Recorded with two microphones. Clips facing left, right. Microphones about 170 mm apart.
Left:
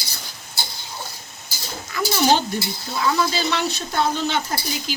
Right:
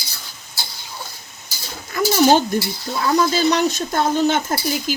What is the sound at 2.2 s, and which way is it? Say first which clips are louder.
Speech: right 3 dB; 45° right (ahead or behind).